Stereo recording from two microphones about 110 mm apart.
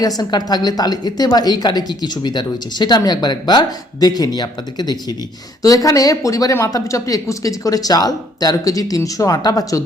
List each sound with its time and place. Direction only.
0.2 s a woman's voice: 40° left (ahead or behind)